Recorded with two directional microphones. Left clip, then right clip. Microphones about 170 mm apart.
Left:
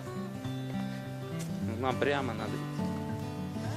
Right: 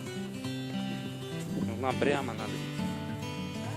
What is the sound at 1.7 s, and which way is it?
Speech, 25° right (ahead or behind).